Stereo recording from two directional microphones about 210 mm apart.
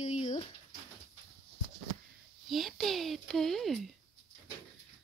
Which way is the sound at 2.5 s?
Centre (ahead or behind).